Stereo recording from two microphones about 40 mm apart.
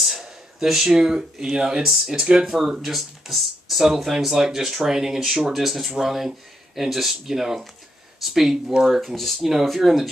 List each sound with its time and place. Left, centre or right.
0.0 s a sound: centre
0.9 s speech: centre
2.1 s speech: right
2.9 s speech: centre
9.0 s speech: centre
9.4 s speech: centre